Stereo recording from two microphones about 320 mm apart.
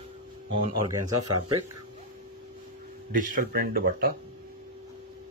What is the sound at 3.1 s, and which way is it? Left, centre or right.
Speech, right.